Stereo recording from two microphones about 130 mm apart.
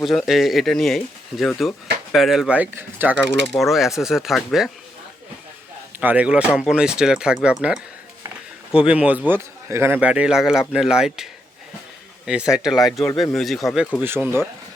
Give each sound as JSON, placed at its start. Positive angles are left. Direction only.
{"t": 0.0, "sound": "a man's voice", "side_deg": 0}
{"t": 3.4, "sound": "speech", "side_deg": 0}
{"t": 6.0, "sound": "a man's voice", "side_deg": -10}
{"t": 14.0, "sound": "a man's voice", "side_deg": -15}